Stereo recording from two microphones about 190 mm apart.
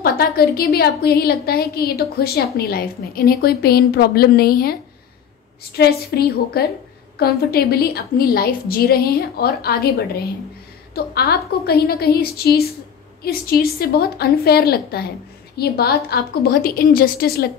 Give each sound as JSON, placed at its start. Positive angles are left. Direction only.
{"t": 0.0, "sound": "a woman's voice", "side_deg": 55}
{"t": 5.8, "sound": "a woman's voice", "side_deg": 55}